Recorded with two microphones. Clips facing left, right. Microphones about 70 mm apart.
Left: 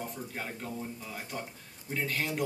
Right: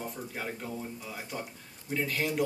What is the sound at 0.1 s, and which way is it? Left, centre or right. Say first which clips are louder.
Speech: right 1 dB; centre.